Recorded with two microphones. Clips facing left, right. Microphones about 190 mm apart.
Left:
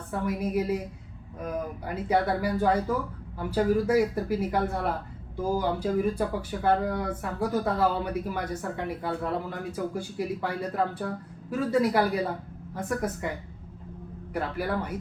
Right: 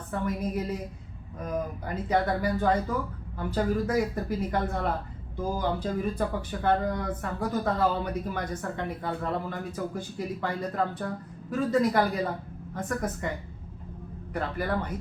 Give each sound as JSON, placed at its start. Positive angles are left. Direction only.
{"t": 0.1, "sound": "speech", "side_deg": 10}
{"t": 1.8, "sound": "speech", "side_deg": 10}
{"t": 14.3, "sound": "speech", "side_deg": 10}